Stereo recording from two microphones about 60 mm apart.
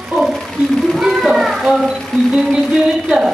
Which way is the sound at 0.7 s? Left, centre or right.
Centre.